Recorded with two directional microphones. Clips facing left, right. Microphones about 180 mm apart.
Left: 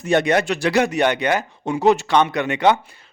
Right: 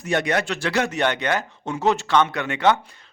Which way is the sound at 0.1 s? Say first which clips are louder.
Left 5 dB; 20° left (ahead or behind).